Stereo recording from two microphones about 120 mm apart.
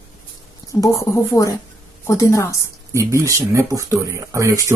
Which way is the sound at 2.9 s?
25° right (ahead or behind).